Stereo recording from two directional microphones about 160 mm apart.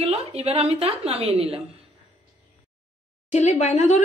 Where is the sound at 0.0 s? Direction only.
40° right (ahead or behind).